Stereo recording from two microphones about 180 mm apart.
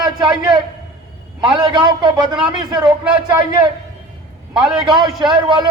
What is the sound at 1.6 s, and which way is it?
A man's voice, 25° right (ahead or behind).